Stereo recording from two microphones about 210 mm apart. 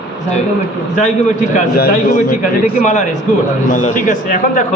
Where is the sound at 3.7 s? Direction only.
35° left (ahead or behind).